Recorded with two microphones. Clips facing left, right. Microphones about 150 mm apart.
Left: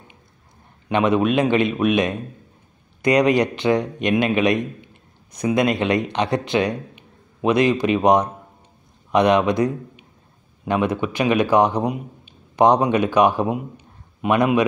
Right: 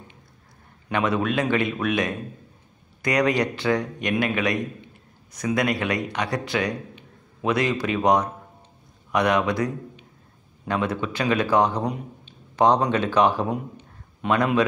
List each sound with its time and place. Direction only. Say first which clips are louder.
0.8 s a man's voice: left 5 dB; 20° left (ahead or behind)